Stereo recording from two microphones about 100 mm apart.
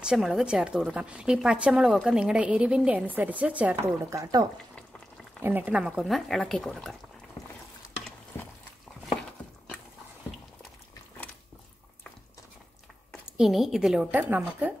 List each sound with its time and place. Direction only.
0.0 s a woman's voice: 5° right (ahead or behind)
3.8 s speech: 30° right (ahead or behind)
5.4 s speech: 20° right (ahead or behind); by 7.0 s 5° left (ahead or behind)
13.4 s a woman's voice: centre (ahead or behind)